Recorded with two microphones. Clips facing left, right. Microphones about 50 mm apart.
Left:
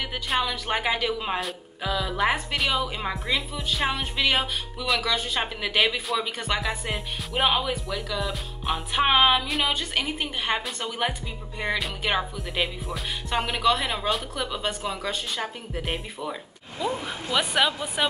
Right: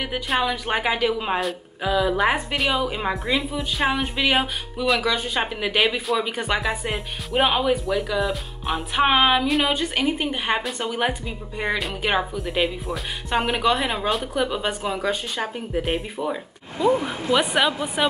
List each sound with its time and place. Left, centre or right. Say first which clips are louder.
0.4 s a woman's voice: right 3 dB; centre
3.3 s a woman's voice: right 4 dB; centre
6.6 s a woman's voice: right 4 dB; centre
12.4 s a woman's voice: right 5 dB; centre